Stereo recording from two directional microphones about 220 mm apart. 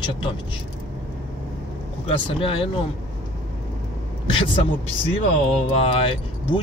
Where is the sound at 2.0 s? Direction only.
25° left (ahead or behind).